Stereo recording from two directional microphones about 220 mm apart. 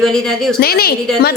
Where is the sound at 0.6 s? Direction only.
45° left (ahead or behind).